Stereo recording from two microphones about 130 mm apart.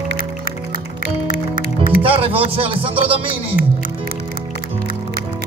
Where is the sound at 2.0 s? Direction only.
45° right (ahead or behind).